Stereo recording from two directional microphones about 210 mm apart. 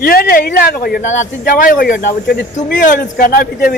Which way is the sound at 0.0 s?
45° left (ahead or behind).